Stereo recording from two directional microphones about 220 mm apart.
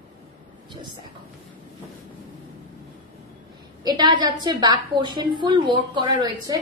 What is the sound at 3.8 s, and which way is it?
A woman's voice, 20° right (ahead or behind).